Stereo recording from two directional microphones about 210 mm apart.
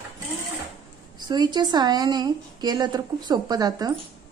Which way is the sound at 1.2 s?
20° right (ahead or behind).